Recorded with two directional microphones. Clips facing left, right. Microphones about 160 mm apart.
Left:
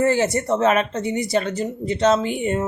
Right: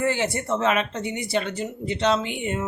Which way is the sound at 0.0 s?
40° left (ahead or behind).